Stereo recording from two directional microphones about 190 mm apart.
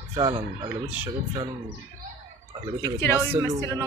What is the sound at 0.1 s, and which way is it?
Speech, 25° right (ahead or behind).